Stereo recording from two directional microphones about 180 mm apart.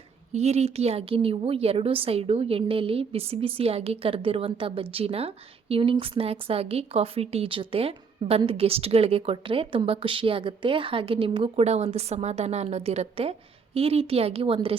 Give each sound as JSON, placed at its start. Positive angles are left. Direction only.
{"t": 0.3, "sound": "a woman's voice", "side_deg": -35}